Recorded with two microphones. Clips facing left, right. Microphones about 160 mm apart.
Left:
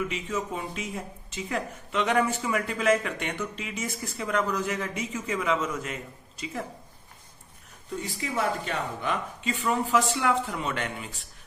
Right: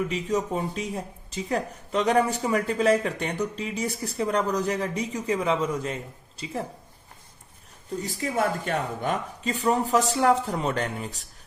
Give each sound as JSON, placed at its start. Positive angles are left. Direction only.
{"t": 0.1, "sound": "speech", "side_deg": -40}
{"t": 7.9, "sound": "speech", "side_deg": -45}